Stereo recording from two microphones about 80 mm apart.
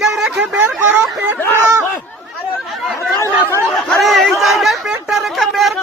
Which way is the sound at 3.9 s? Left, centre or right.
Centre.